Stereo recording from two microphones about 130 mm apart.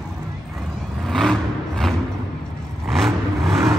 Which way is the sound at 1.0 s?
Centre (ahead or behind).